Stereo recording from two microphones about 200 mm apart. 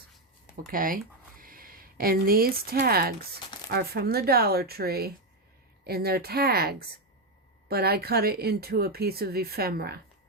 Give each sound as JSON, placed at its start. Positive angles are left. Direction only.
{"t": 0.7, "sound": "speech", "side_deg": -45}